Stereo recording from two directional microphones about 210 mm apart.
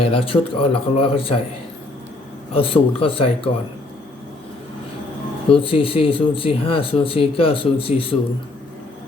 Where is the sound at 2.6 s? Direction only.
25° left (ahead or behind).